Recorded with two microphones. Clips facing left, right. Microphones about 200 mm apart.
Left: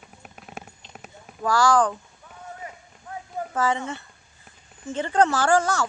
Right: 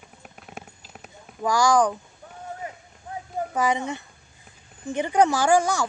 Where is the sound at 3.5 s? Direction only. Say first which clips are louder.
Even; 15° right (ahead or behind).